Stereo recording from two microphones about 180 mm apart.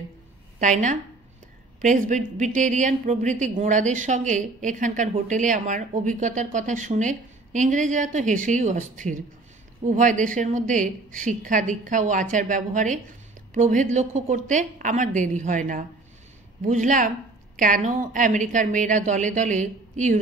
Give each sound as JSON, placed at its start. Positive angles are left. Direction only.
{"t": 0.6, "sound": "speech", "side_deg": -45}